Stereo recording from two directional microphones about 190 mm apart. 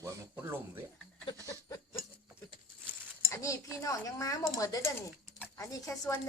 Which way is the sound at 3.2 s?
15° left (ahead or behind).